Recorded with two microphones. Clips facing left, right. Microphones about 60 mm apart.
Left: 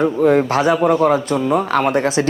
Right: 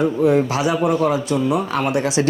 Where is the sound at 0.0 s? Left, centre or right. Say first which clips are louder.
Left 2 dB; left.